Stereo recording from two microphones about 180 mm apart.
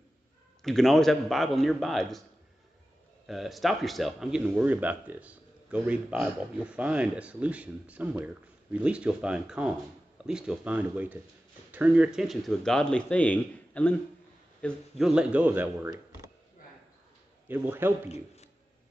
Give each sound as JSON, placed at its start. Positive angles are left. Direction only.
{"t": 0.6, "sound": "speech", "side_deg": 0}
{"t": 3.3, "sound": "a man's voice", "side_deg": 0}
{"t": 17.5, "sound": "a man's voice", "side_deg": -10}
{"t": 18.0, "sound": "a man's voice", "side_deg": 35}